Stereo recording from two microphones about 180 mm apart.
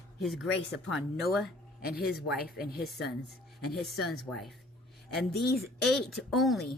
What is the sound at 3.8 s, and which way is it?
Speech, centre (ahead or behind).